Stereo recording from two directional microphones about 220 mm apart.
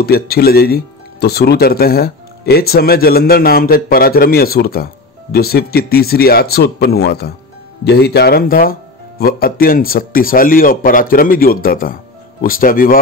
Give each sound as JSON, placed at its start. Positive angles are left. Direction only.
{"t": 0.0, "sound": "a man's voice", "side_deg": 45}